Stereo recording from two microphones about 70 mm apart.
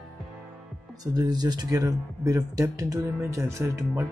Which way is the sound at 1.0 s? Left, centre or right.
Right.